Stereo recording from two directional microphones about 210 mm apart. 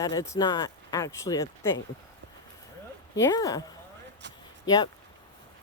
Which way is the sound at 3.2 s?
15° left (ahead or behind).